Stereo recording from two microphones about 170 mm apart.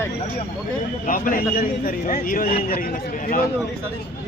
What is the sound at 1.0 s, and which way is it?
A man's voice, 55° left (ahead or behind).